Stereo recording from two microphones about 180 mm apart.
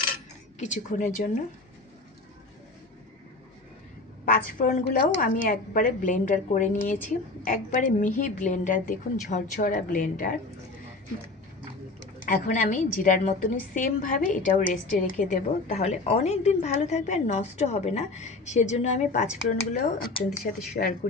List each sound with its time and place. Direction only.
0.1 s coin: 45° left (ahead or behind)
4.3 s a woman's voice: 55° left (ahead or behind)
12.2 s a woman's voice: 50° left (ahead or behind)